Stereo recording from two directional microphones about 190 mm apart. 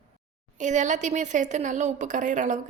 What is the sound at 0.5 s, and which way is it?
A woman's voice, 40° right (ahead or behind).